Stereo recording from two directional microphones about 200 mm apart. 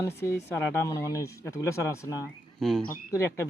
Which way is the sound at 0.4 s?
15° left (ahead or behind).